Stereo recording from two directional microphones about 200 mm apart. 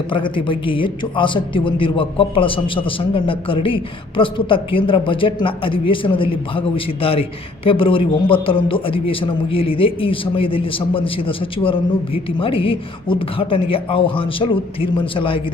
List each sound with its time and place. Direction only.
0.1 s a man's voice: 25° left (ahead or behind)